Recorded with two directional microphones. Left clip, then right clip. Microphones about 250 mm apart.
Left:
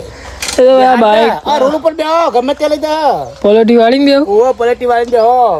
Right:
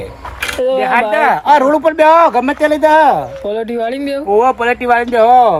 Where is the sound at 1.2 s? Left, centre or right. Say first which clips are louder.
Right 2 dB; right.